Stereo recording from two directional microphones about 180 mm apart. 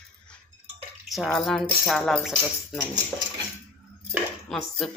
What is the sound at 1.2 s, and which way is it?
Speech, 5° left (ahead or behind).